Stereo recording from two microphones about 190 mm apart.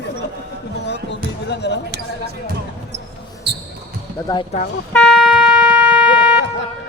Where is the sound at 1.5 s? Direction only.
65° left (ahead or behind).